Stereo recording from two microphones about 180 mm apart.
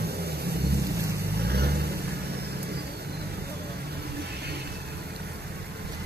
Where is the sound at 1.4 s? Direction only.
65° right (ahead or behind).